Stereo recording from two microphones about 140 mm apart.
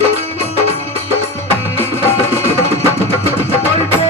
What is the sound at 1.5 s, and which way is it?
Music, 15° left (ahead or behind).